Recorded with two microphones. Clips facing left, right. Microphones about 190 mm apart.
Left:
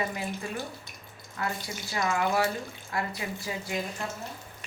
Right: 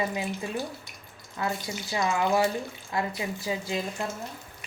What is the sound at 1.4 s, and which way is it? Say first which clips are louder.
Speech: right 3 dB; 20° right (ahead or behind).